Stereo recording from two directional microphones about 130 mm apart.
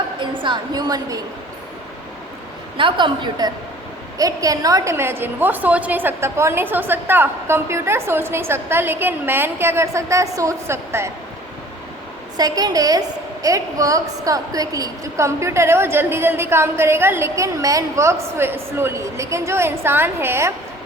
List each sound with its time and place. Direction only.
0.2 s a woman's voice: 40° right (ahead or behind)
2.7 s a woman's voice: 40° right (ahead or behind); by 11.1 s 20° right (ahead or behind)
12.4 s a woman's voice: 30° right (ahead or behind)